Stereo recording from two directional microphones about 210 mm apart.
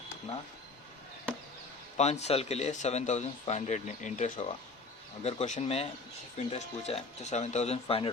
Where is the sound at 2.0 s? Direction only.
30° left (ahead or behind).